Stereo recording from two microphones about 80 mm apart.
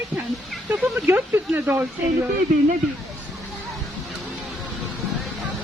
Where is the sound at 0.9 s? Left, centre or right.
Right.